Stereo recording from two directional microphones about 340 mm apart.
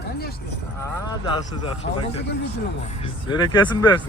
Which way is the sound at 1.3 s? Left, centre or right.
Centre.